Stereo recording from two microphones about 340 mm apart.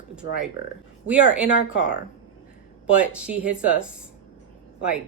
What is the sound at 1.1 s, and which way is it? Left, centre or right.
Speech, centre.